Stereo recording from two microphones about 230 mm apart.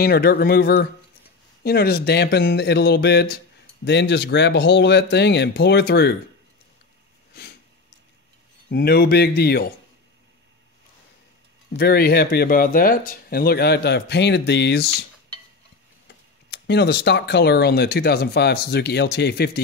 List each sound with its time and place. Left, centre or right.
0.0 s speech: left
8.6 s speech: left
11.7 s speech: left
16.1 s speech: left